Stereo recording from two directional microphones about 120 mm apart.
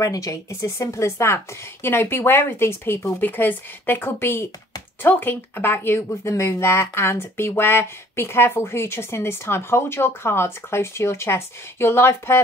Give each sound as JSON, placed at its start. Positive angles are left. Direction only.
{"t": 0.0, "sound": "speech", "side_deg": 30}